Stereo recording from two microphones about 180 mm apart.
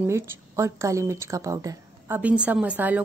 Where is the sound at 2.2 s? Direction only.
5° right (ahead or behind).